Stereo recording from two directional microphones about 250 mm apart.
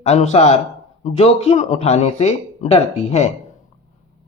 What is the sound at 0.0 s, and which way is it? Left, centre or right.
Speech, left.